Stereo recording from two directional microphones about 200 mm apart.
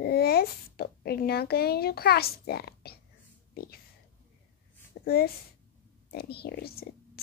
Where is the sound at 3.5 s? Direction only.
50° left (ahead or behind).